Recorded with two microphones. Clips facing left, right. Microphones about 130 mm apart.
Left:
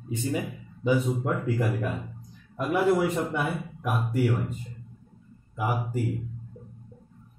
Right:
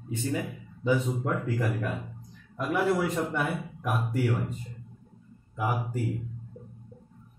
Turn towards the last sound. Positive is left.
turn(degrees=5)  # may be behind; listen again after turning